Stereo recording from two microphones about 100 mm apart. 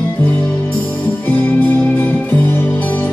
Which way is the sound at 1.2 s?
20° left (ahead or behind).